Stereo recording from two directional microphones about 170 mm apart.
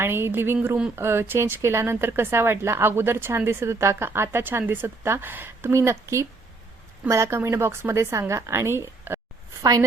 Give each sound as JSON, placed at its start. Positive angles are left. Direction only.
{"t": 0.0, "sound": "speech", "side_deg": -15}